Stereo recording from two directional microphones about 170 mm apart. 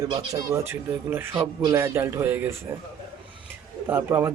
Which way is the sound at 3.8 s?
15° right (ahead or behind).